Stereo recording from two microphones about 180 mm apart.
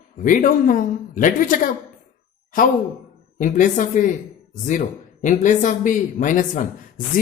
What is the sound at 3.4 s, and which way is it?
Speech, 45° left (ahead or behind).